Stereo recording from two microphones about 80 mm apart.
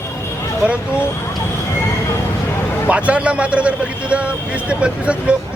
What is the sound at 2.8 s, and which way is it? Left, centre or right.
A man's voice, centre.